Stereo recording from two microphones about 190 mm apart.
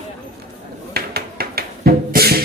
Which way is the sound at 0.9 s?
55° right (ahead or behind).